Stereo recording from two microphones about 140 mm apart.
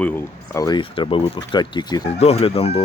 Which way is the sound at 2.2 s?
50° left (ahead or behind).